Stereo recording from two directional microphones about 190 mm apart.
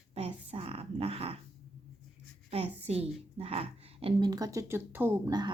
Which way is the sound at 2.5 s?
35° right (ahead or behind).